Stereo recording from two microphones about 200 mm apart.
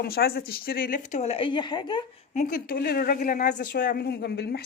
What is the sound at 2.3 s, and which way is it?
A woman's voice, 40° left (ahead or behind).